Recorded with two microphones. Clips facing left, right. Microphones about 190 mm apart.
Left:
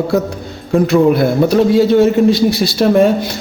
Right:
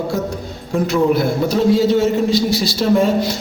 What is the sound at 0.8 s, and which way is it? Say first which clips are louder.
A man's voice: left 4 dB; 60° left (ahead or behind).